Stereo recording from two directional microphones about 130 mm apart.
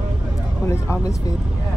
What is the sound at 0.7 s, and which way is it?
Speech, 25° left (ahead or behind).